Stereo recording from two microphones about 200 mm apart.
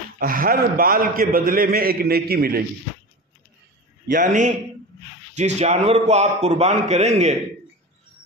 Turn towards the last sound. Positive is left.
turn(degrees=-35)  # may be behind; listen again after turning